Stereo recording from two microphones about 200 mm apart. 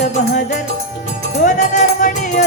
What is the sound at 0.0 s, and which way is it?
Music, 40° left (ahead or behind).